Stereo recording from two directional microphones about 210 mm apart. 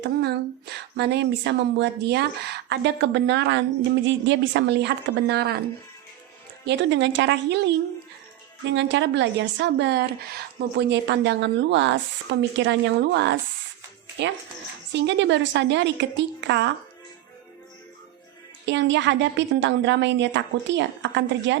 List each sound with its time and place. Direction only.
0.0 s a woman's voice: 50° right (ahead or behind)
6.7 s a woman's voice: 60° right (ahead or behind)
8.7 s a woman's voice: 55° right (ahead or behind)
18.6 s a woman's voice: 55° right (ahead or behind)